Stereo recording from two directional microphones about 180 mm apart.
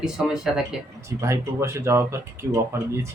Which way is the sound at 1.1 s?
15° right (ahead or behind).